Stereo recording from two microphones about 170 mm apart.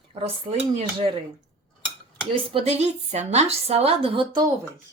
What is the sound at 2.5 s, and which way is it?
Speech, 40° right (ahead or behind).